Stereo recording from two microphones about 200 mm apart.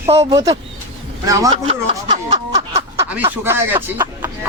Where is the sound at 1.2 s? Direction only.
15° right (ahead or behind).